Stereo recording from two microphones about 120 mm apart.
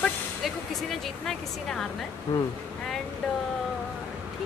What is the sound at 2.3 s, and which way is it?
Speech, 25° left (ahead or behind).